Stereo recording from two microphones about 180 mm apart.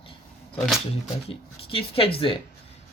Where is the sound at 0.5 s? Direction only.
5° left (ahead or behind).